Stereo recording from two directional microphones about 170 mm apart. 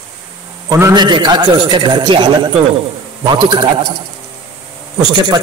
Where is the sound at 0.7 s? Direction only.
20° right (ahead or behind).